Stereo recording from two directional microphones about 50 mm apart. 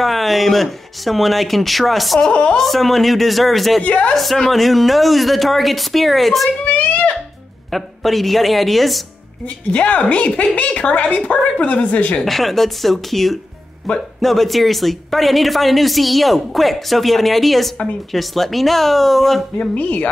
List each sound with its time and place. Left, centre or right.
0.0 s speech: centre
3.8 s a woman's voice: left
4.1 s speech: centre
6.6 s a sound: left
7.7 s speech: centre
9.5 s a woman's voice: left
12.2 s speech: centre
19.6 s a woman's voice: left